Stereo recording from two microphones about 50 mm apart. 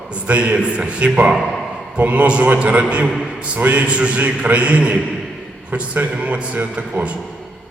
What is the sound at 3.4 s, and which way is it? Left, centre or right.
A man's voice, right.